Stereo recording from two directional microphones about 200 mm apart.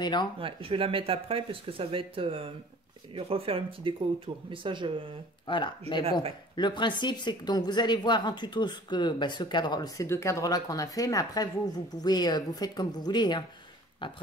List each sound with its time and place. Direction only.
0.0 s a woman's voice: 20° left (ahead or behind)
0.4 s speech: 25° right (ahead or behind)
5.5 s a woman's voice: 25° left (ahead or behind)